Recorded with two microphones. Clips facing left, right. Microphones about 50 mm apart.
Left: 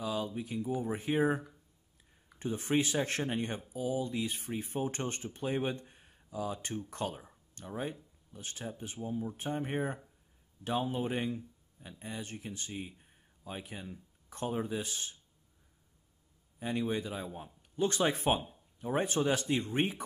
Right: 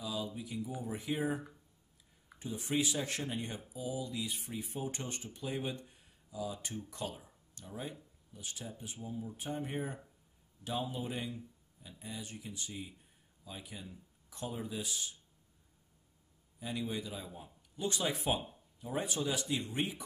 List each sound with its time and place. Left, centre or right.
0.0 s a sound: left
0.4 s speech: left
16.5 s speech: left